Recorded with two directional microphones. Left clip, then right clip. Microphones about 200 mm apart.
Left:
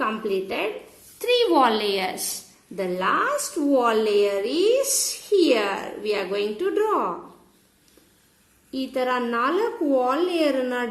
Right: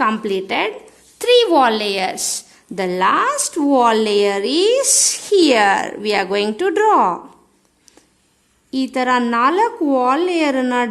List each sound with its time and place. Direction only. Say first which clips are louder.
0.0 s a woman's voice: right 7 dB; 50° right (ahead or behind)
1.2 s a woman's voice: right 7 dB; 35° right (ahead or behind)
2.7 s a woman's voice: right 7 dB; 50° right (ahead or behind)
8.7 s a woman's voice: right 7 dB; 50° right (ahead or behind)